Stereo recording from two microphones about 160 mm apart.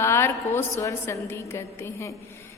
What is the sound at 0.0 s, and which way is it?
A woman's voice, 15° left (ahead or behind).